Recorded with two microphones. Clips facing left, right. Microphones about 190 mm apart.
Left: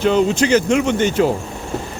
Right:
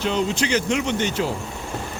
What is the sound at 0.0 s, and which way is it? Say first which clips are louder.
Speech: left 7 dB; 50° left (ahead or behind).